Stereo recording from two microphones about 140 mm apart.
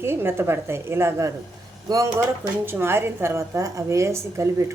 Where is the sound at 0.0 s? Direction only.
15° right (ahead or behind).